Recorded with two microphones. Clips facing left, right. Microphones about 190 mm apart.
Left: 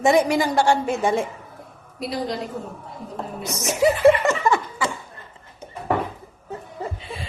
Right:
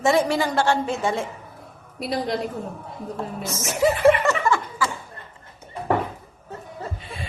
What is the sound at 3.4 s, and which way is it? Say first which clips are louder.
Speech: left 2 dB; 15° left (ahead or behind).